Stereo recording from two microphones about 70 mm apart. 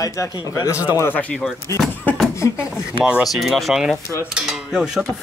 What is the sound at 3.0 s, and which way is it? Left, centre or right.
Speech, centre.